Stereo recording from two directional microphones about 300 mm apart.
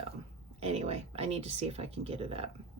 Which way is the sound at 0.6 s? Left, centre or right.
Right.